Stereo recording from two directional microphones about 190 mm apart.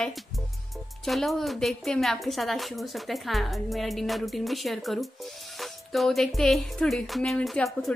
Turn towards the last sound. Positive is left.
turn(degrees=0)  # may be behind; listen again after turning